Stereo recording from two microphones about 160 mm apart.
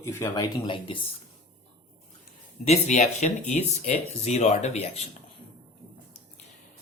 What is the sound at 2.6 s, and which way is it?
Speech, 45° left (ahead or behind).